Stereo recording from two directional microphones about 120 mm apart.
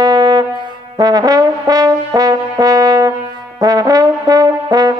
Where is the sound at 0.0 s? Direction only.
35° right (ahead or behind).